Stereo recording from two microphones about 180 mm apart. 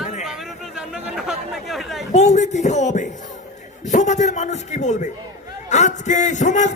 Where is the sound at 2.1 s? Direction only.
40° left (ahead or behind).